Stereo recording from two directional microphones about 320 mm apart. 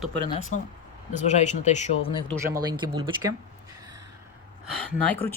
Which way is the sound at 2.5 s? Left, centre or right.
Centre.